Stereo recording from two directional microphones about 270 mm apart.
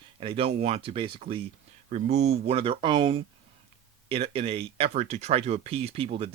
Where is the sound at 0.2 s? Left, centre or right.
Centre.